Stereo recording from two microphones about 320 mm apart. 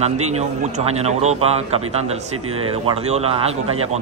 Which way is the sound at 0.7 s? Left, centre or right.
Right.